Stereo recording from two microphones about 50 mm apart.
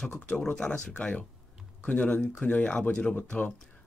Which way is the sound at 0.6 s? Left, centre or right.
Left.